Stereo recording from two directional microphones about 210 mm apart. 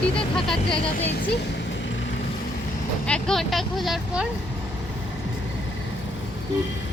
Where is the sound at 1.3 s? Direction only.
60° left (ahead or behind).